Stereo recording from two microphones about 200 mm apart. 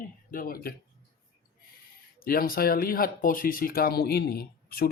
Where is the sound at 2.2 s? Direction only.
45° left (ahead or behind).